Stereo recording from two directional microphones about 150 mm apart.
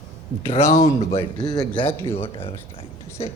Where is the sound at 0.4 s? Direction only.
40° left (ahead or behind).